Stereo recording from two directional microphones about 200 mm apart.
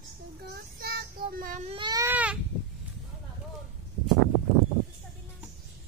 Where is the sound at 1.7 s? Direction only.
20° right (ahead or behind).